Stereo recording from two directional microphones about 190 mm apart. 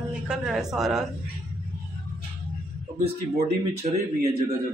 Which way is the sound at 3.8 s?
40° right (ahead or behind).